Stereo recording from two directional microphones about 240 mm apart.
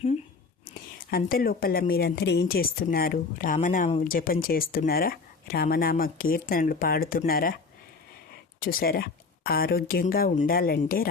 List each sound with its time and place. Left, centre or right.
0.7 s speech: left
8.6 s speech: left